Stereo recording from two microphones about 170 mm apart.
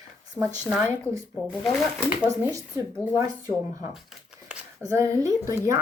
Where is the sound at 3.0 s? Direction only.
20° right (ahead or behind).